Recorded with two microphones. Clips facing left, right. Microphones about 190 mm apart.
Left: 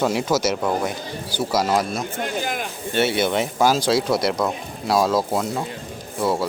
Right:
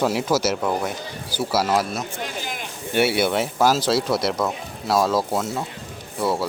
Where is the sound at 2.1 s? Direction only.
50° left (ahead or behind).